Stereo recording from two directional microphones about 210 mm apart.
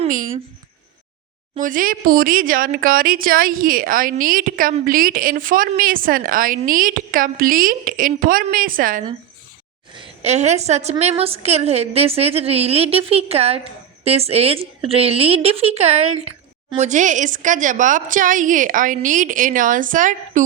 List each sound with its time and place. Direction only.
0.0 s speech: 40° right (ahead or behind)
1.5 s speech: 40° right (ahead or behind)
9.9 s a woman's voice: 25° right (ahead or behind)